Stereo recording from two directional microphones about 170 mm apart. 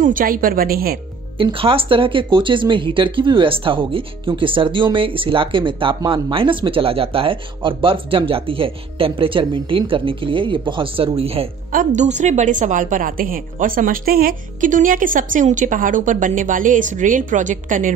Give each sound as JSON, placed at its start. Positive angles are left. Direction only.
{"t": 0.0, "sound": "a woman's voice", "side_deg": -55}
{"t": 1.4, "sound": "speech", "side_deg": -30}
{"t": 11.7, "sound": "a woman's voice", "side_deg": -50}